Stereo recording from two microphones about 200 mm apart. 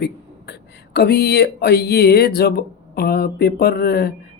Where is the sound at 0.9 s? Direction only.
55° left (ahead or behind).